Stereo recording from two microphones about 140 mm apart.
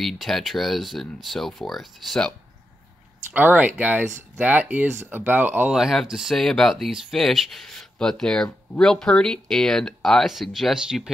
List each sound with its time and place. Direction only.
0.0 s speech: centre (ahead or behind)
3.3 s speech: 10° right (ahead or behind)